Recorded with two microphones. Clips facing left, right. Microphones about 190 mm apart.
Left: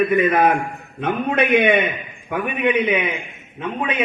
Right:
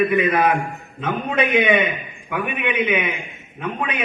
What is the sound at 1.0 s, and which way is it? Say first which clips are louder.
A man's voice: left 2 dB; 60° left (ahead or behind).